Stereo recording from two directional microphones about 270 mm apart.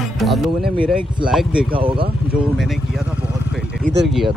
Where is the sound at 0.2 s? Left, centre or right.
Centre.